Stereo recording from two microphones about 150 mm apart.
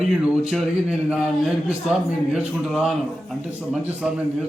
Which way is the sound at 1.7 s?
5° right (ahead or behind).